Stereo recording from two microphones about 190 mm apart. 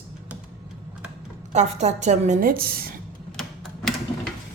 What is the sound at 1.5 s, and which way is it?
A woman's voice, 35° right (ahead or behind).